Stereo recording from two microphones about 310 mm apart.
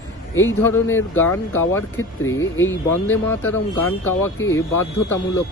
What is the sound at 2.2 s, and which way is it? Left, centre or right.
Speech, left.